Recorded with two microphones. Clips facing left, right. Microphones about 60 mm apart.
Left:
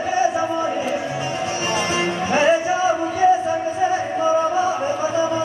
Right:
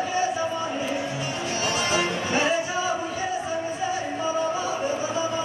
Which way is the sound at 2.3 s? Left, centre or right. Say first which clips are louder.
Left 8 dB; left.